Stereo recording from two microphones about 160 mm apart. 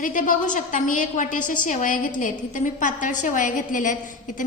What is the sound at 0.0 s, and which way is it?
A woman's voice, 55° left (ahead or behind).